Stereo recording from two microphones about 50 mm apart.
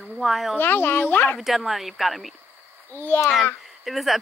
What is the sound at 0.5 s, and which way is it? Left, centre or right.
Speech, left.